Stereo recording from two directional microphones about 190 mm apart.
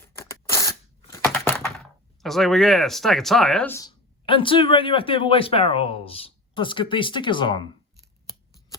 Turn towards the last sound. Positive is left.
turn(degrees=25)  # may be behind; listen again after turning